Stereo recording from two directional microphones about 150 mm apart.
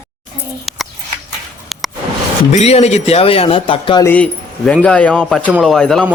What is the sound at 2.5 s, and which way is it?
Speech, 45° left (ahead or behind).